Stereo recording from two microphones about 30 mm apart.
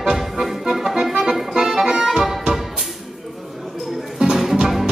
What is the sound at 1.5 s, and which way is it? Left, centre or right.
Accordion, right.